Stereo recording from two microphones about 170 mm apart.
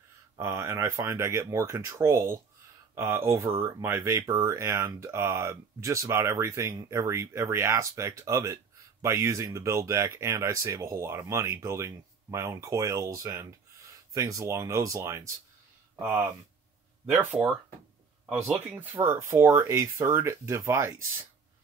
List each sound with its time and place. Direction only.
0.4 s speech: 15° right (ahead or behind)
18.7 s speech: 10° right (ahead or behind)